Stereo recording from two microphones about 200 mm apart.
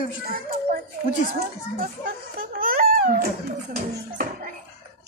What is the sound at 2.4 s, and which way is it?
Crying, 45° right (ahead or behind).